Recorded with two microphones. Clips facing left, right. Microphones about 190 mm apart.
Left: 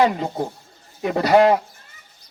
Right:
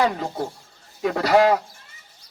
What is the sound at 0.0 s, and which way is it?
Speech, 20° left (ahead or behind).